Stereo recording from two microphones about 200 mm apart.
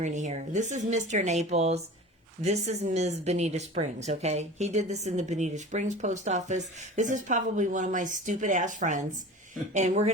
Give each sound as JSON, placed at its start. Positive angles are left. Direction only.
{"t": 0.0, "sound": "speech", "side_deg": -35}